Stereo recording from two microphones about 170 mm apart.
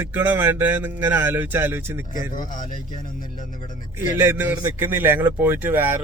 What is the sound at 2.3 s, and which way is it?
Speech, 50° left (ahead or behind).